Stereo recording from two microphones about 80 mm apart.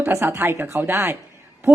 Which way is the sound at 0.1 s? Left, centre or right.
Right.